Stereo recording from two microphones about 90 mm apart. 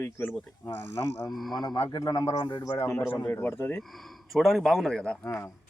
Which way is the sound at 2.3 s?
65° left (ahead or behind).